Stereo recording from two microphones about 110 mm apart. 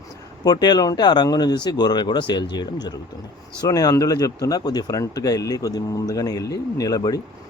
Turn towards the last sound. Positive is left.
turn(degrees=35)  # may be behind; listen again after turning